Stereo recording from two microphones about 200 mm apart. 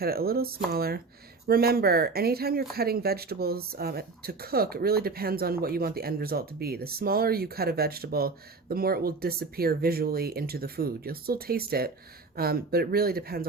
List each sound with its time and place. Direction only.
0.0 s speech: 50° right (ahead or behind)